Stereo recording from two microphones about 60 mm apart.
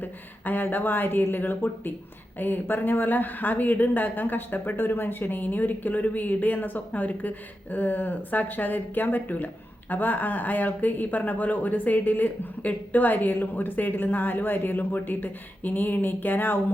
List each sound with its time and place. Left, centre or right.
0.0 s speech: left